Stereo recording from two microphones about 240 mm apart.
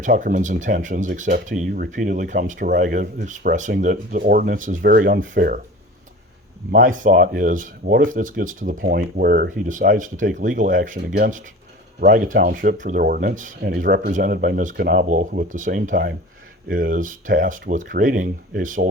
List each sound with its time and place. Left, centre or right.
0.0 s speech: right
6.7 s speech: right